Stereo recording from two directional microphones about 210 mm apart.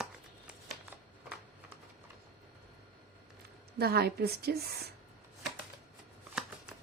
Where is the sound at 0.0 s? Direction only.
5° right (ahead or behind).